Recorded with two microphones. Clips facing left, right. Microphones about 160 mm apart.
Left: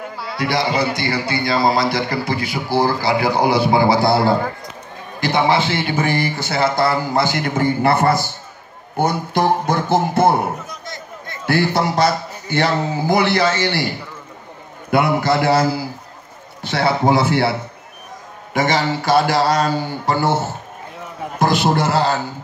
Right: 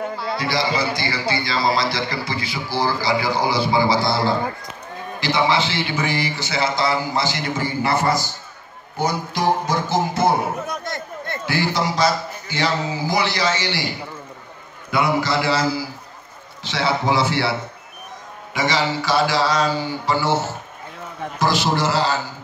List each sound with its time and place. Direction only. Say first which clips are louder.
0.4 s a man's voice: left 5 dB; 60° left (ahead or behind)
10.7 s a sound: right 5 dB; 60° right (ahead or behind)
11.4 s a man's voice: left 5 dB; 55° left (ahead or behind)